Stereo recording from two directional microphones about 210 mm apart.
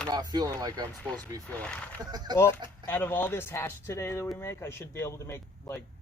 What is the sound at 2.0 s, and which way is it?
Speech, 20° right (ahead or behind).